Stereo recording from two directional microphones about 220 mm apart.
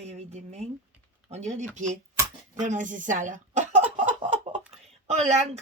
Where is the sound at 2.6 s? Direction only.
35° right (ahead or behind).